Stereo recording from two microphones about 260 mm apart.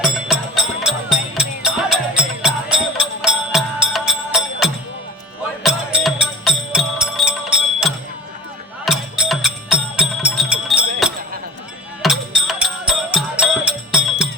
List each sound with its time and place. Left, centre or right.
0.0 s music: centre